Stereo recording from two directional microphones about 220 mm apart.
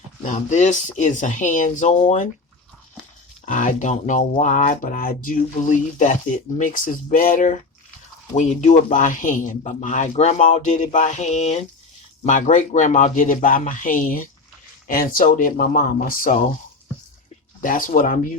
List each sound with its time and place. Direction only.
0.2 s speech: 35° left (ahead or behind)
3.4 s speech: 35° left (ahead or behind)
17.6 s speech: 40° left (ahead or behind)